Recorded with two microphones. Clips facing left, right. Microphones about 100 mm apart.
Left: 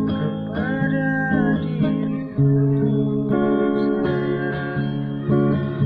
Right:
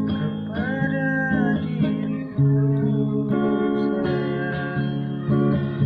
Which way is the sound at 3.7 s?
10° left (ahead or behind).